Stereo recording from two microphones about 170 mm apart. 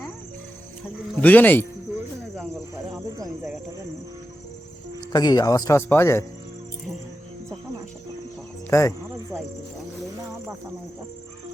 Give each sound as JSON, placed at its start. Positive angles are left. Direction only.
{"t": 1.1, "sound": "speech", "side_deg": 10}
{"t": 4.9, "sound": "speech", "side_deg": 25}
{"t": 8.7, "sound": "speech", "side_deg": 20}